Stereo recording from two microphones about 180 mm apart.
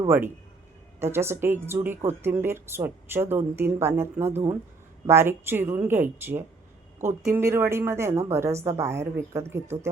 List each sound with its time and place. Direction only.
0.9 s speech: 15° right (ahead or behind)
7.0 s speech: 40° right (ahead or behind)
7.3 s speech: 15° right (ahead or behind)